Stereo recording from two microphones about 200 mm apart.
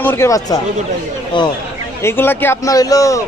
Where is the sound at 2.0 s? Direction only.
10° left (ahead or behind).